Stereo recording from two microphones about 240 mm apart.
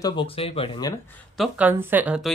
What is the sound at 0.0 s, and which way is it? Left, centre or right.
Speech, centre.